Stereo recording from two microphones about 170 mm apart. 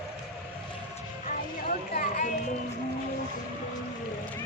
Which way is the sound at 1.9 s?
55° left (ahead or behind).